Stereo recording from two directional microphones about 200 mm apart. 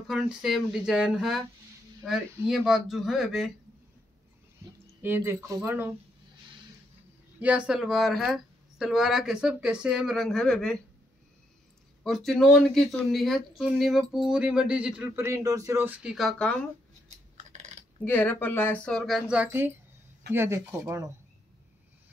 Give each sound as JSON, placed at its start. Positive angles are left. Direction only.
{"t": 0.1, "sound": "speech", "side_deg": 0}
{"t": 5.0, "sound": "speech", "side_deg": -10}
{"t": 7.3, "sound": "speech", "side_deg": -5}
{"t": 12.0, "sound": "speech", "side_deg": 0}
{"t": 17.4, "sound": "coin", "side_deg": -35}
{"t": 18.0, "sound": "speech", "side_deg": 10}